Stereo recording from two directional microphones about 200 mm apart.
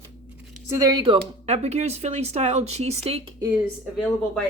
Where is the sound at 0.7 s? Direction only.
15° right (ahead or behind); by 3.2 s 30° right (ahead or behind).